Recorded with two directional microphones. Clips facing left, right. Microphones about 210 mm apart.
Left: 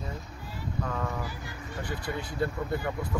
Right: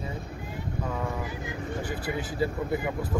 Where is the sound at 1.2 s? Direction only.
20° right (ahead or behind).